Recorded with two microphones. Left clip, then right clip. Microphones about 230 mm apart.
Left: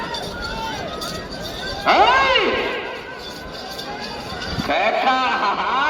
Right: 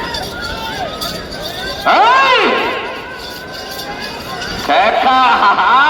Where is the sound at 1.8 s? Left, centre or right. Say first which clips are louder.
Right 5 dB; right.